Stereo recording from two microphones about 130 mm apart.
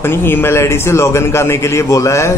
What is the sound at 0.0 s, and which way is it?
A man's voice, 15° left (ahead or behind).